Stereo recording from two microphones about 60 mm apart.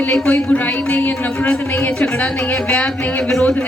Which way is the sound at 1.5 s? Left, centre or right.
Centre.